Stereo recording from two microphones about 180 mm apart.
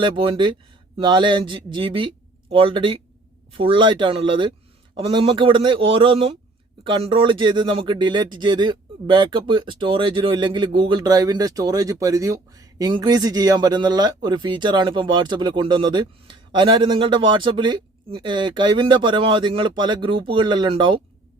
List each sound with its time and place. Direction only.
0.0 s speech: 30° right (ahead or behind)